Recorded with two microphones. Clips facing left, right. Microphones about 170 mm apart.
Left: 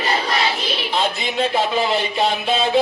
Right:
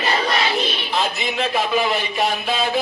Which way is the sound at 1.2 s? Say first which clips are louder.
Left 2 dB; 30° left (ahead or behind).